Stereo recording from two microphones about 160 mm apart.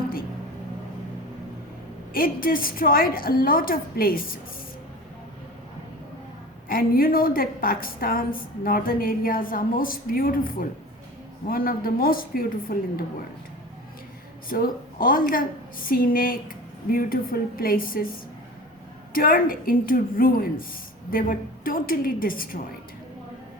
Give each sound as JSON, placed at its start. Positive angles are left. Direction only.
{"t": 2.1, "sound": "a woman's voice", "side_deg": 60}
{"t": 6.7, "sound": "a woman's voice", "side_deg": 65}
{"t": 14.5, "sound": "a woman's voice", "side_deg": 65}